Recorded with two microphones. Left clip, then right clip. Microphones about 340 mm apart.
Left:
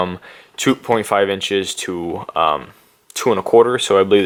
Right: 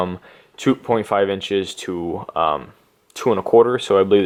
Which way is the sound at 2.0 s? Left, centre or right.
Centre.